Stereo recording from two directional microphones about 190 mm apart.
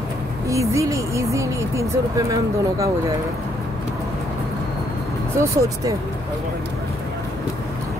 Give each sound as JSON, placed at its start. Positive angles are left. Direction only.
{"t": 0.5, "sound": "speech", "side_deg": -15}
{"t": 5.4, "sound": "speech", "side_deg": -15}